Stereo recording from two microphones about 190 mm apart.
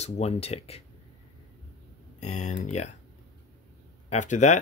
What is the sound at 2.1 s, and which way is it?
Speech, 40° left (ahead or behind).